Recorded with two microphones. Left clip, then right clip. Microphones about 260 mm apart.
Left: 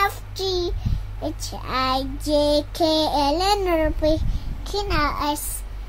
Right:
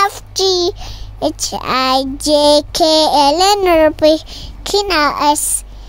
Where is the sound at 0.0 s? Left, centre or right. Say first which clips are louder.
Right 9 dB; right.